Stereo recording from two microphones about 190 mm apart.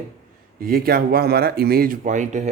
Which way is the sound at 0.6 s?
50° right (ahead or behind).